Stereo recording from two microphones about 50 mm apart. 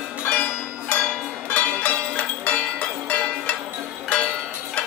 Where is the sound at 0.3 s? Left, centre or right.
Left.